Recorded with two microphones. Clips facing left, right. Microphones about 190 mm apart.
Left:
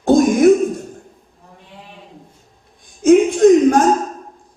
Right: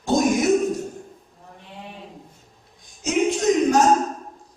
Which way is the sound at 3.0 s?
55° left (ahead or behind).